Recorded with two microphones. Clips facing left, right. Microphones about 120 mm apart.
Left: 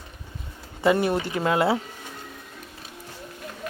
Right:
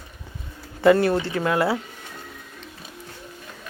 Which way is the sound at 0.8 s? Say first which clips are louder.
Right 4 dB; 15° left (ahead or behind).